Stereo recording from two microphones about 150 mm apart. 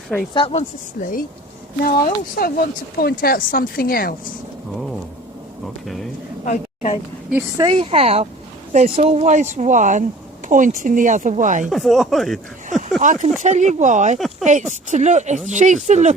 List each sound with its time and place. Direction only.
0.3 s speech: 40° left (ahead or behind)
1.0 s speech: 55° left (ahead or behind)
1.8 s speech: 75° left (ahead or behind)
5.6 s speech: centre (ahead or behind)
6.4 s a woman's voice: 55° left (ahead or behind)
7.5 s a woman's voice: 30° right (ahead or behind); by 11.7 s 55° right (ahead or behind)
11.7 s speech: centre (ahead or behind)
13.0 s speech: 60° right (ahead or behind)
14.2 s speech: centre (ahead or behind)
14.4 s speech: 55° right (ahead or behind)